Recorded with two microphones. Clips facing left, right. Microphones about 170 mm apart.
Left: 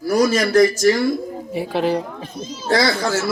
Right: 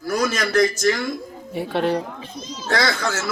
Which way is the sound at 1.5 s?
Centre (ahead or behind).